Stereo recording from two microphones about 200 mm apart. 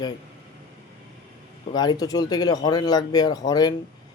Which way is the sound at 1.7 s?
20° left (ahead or behind).